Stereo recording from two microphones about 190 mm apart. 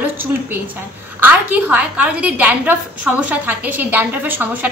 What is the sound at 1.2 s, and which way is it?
A woman's voice, 10° right (ahead or behind).